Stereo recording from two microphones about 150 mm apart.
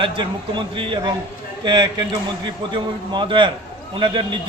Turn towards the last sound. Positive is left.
turn(degrees=-30)  # may be behind; listen again after turning